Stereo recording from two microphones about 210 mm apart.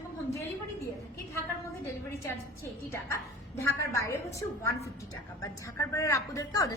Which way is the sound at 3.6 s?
15° left (ahead or behind).